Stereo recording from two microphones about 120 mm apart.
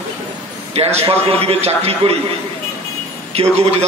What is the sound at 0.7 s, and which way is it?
A man's voice, 60° right (ahead or behind).